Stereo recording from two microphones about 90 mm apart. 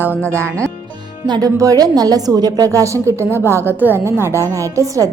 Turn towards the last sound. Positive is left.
turn(degrees=-35)  # may be behind; listen again after turning